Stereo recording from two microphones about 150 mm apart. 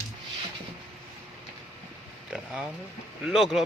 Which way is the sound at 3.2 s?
Centre (ahead or behind).